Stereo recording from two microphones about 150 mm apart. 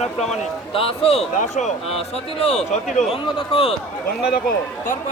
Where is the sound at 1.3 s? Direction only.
55° left (ahead or behind).